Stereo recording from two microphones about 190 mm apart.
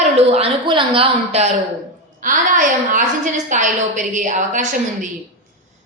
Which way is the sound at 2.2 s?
45° right (ahead or behind).